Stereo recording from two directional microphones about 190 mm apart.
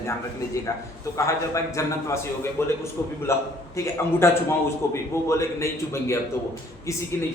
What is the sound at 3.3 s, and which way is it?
A man's voice, 15° left (ahead or behind).